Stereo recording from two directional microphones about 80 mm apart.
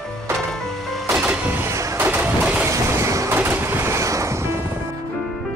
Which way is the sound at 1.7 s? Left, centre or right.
Right.